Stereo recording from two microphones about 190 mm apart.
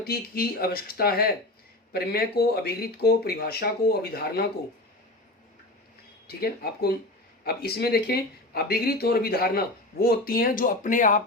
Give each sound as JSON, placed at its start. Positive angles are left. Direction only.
{"t": 0.0, "sound": "speech", "side_deg": 50}
{"t": 6.2, "sound": "speech", "side_deg": 55}